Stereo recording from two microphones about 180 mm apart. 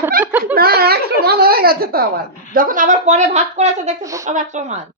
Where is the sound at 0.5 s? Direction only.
60° right (ahead or behind).